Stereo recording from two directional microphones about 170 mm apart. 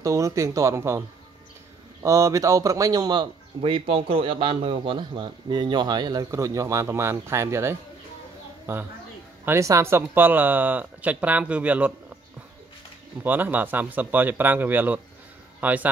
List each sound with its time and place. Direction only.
0.0 s speech: 20° right (ahead or behind)
2.0 s speech: 20° right (ahead or behind)
13.2 s speech: 10° right (ahead or behind)